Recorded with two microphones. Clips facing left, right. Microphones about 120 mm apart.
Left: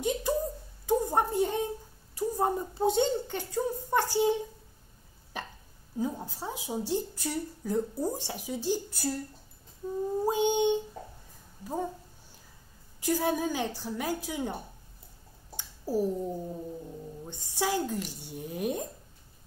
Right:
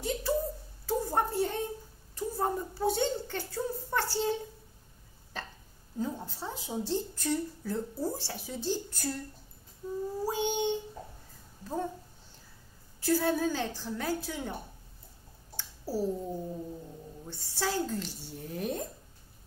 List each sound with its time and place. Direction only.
0.0 s a sound: 20° left (ahead or behind)
2.1 s a woman's voice: 15° left (ahead or behind)
5.3 s hiccup: 15° left (ahead or behind)
5.9 s a woman's voice: 10° left (ahead or behind)
10.2 s a woman's voice: 20° left (ahead or behind)
13.0 s a woman's voice: 15° left (ahead or behind)
15.5 s a sound: 15° left (ahead or behind)
17.2 s a woman's voice: 15° left (ahead or behind)